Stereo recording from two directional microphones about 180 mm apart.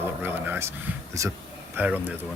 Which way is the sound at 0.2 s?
10° right (ahead or behind).